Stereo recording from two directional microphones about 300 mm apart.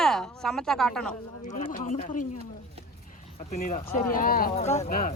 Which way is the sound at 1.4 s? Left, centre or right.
Left.